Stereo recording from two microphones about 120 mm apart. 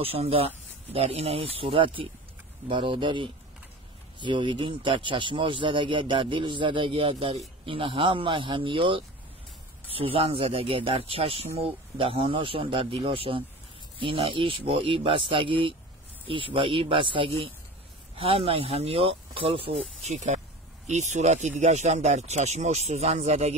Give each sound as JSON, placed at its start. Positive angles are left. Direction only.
{"t": 0.0, "sound": "a man's voice", "side_deg": -55}